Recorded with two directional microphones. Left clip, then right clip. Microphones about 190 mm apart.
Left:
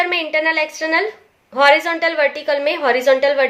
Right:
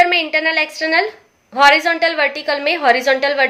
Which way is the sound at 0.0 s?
15° right (ahead or behind).